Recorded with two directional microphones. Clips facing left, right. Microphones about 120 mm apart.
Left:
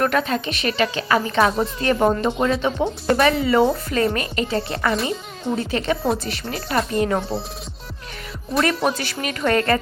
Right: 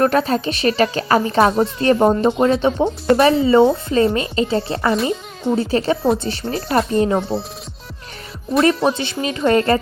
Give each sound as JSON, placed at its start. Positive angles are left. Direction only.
{"t": 0.0, "sound": "a woman's voice", "side_deg": -35}
{"t": 7.2, "sound": "speech", "side_deg": 0}
{"t": 8.7, "sound": "speech", "side_deg": 0}
{"t": 9.2, "sound": "speech", "side_deg": -25}